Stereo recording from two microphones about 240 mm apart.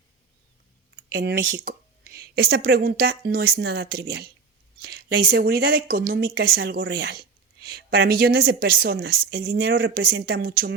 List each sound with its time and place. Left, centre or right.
1.1 s speech: right